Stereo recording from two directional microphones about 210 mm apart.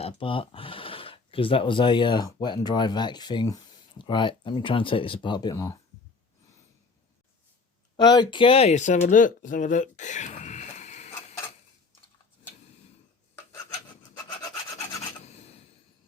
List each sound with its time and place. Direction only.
0.0 s speech: 25° left (ahead or behind)
7.9 s speech: 20° left (ahead or behind)
15.2 s a sound: 30° left (ahead or behind)